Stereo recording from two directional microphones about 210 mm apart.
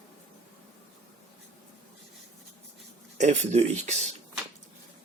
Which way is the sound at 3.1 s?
30° right (ahead or behind).